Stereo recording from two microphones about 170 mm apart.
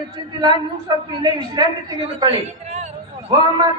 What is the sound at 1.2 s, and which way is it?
A woman's voice, 25° right (ahead or behind).